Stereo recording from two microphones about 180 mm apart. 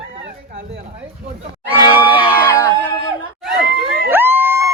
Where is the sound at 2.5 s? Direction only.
10° left (ahead or behind).